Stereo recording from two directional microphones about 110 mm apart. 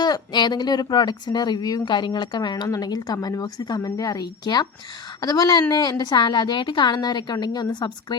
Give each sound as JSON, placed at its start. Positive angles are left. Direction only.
{"t": 0.0, "sound": "speech", "side_deg": 40}